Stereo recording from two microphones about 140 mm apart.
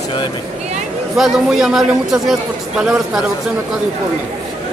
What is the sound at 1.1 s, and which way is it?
Speech, centre (ahead or behind).